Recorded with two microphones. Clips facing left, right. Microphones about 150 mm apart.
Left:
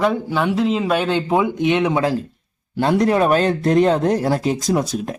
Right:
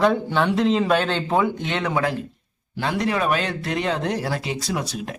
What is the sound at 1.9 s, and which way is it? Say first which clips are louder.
Speech: left 4 dB; 30° left (ahead or behind).